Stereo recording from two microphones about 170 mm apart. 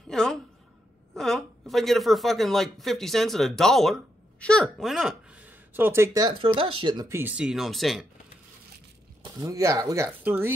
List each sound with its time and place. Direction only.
0.1 s a sound: 5° left (ahead or behind)
1.1 s speech: centre (ahead or behind); by 7.2 s 25° right (ahead or behind)
7.2 s speech: 10° right (ahead or behind)
9.2 s speech: 20° right (ahead or behind)